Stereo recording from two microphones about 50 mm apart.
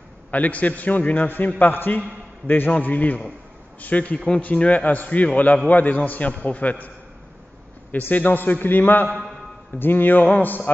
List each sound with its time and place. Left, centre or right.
0.3 s a man's voice: left
7.9 s a man's voice: left